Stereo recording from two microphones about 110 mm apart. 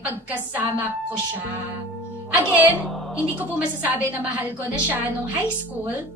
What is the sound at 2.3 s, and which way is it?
A woman's voice, 15° right (ahead or behind).